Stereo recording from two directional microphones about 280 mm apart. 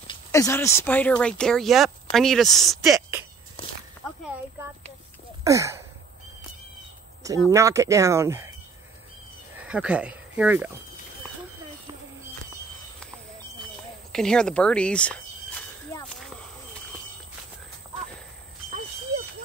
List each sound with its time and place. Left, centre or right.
0.0 s speech: centre
5.4 s a sound: centre
7.4 s speech: centre
9.7 s speech: centre
14.1 s speech: centre